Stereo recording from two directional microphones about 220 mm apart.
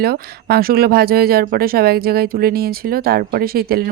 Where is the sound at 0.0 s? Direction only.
45° right (ahead or behind).